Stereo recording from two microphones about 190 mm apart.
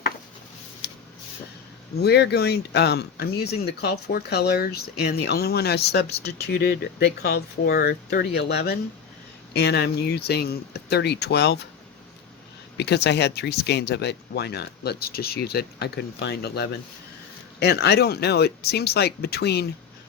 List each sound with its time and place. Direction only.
2.0 s speech: 60° left (ahead or behind)
12.7 s speech: 60° left (ahead or behind)